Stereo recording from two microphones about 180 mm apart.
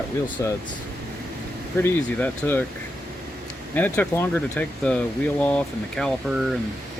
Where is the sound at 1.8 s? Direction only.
10° left (ahead or behind).